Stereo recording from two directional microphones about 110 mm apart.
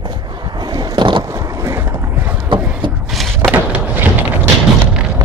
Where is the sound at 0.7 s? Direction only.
45° right (ahead or behind).